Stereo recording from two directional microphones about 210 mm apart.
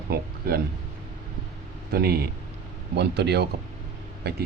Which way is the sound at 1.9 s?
50° right (ahead or behind).